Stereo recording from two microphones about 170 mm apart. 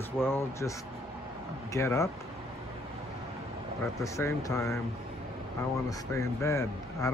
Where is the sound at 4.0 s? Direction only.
20° left (ahead or behind).